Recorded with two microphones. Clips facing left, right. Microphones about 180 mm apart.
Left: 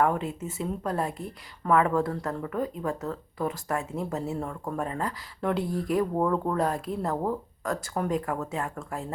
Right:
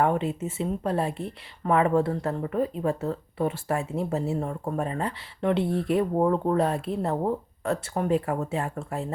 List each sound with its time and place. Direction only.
0.0 s speech: 25° right (ahead or behind)